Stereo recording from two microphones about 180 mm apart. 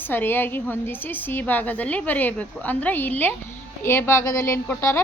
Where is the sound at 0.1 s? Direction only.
10° left (ahead or behind).